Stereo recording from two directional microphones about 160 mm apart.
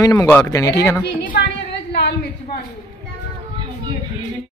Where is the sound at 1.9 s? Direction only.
90° left.